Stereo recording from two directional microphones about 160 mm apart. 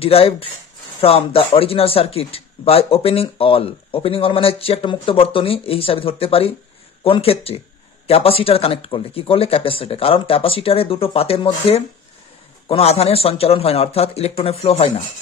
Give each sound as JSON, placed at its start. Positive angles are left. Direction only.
{"t": 0.0, "sound": "speech", "side_deg": 35}